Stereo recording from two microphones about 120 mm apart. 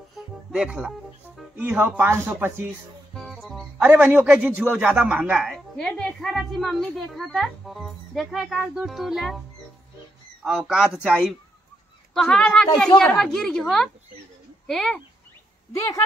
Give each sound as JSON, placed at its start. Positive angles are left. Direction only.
{"t": 0.5, "sound": "speech", "side_deg": -5}
{"t": 3.2, "sound": "music", "side_deg": 0}
{"t": 3.8, "sound": "a man's voice", "side_deg": -15}
{"t": 5.5, "sound": "a woman's voice", "side_deg": 5}
{"t": 10.4, "sound": "a woman's voice", "side_deg": -5}
{"t": 12.1, "sound": "a woman's voice", "side_deg": 5}
{"t": 15.7, "sound": "a woman's voice", "side_deg": 25}